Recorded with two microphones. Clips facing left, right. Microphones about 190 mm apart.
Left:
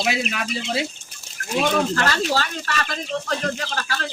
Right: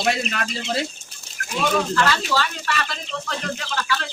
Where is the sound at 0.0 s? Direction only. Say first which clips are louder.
Right 1 dB; 5° left (ahead or behind).